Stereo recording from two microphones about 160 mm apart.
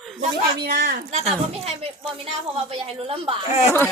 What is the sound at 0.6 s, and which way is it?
Speech, 90° right.